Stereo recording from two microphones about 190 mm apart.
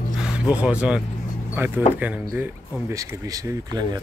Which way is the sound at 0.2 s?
5° right (ahead or behind).